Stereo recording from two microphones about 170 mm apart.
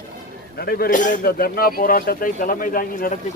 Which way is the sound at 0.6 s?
65° left (ahead or behind).